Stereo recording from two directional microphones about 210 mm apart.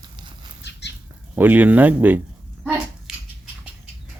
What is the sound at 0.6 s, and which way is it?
Bird flight, 55° left (ahead or behind).